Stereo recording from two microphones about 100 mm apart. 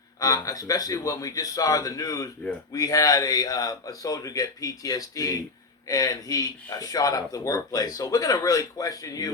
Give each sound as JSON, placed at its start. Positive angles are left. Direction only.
{"t": 0.2, "sound": "speech", "side_deg": 40}